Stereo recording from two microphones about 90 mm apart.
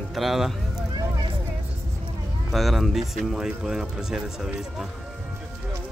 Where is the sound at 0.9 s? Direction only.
55° right (ahead or behind).